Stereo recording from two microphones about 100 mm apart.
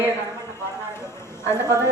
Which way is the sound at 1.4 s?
30° left (ahead or behind).